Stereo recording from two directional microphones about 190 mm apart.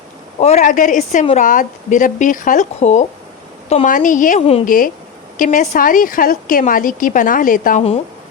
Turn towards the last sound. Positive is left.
turn(degrees=45)  # may be behind; listen again after turning